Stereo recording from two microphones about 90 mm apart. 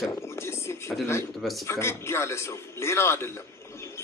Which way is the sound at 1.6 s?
30° left (ahead or behind).